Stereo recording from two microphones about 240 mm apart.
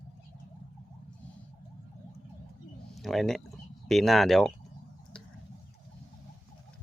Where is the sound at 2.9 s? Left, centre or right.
Centre.